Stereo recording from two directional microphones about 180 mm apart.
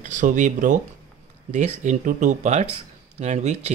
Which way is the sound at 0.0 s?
45° right (ahead or behind).